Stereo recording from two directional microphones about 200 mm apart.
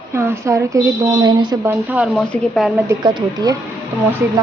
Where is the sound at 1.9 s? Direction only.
5° right (ahead or behind).